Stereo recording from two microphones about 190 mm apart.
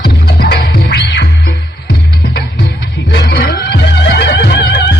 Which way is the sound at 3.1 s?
55° left (ahead or behind).